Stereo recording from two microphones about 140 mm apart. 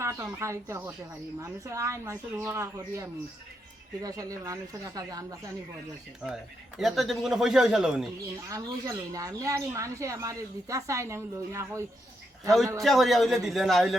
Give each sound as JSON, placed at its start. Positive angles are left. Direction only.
{"t": 0.0, "sound": "speech", "side_deg": -20}
{"t": 6.2, "sound": "speech", "side_deg": 0}
{"t": 8.4, "sound": "speech", "side_deg": -25}
{"t": 12.8, "sound": "speech", "side_deg": 0}